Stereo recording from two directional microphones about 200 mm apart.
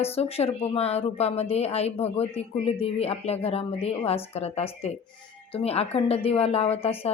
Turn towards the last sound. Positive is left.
turn(degrees=30)  # may be behind; listen again after turning